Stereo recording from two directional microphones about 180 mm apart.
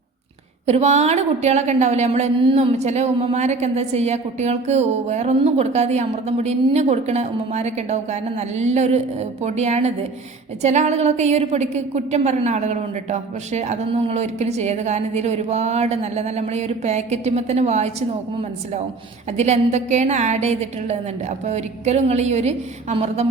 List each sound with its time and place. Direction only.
0.7 s a woman's voice: 40° right (ahead or behind)
19.4 s a woman's voice: 40° right (ahead or behind)